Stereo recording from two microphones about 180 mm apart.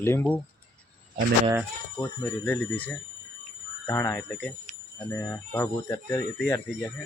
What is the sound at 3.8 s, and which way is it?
Speech, 15° left (ahead or behind).